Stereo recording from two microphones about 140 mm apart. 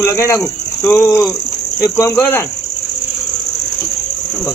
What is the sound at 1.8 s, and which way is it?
Speech, 20° left (ahead or behind).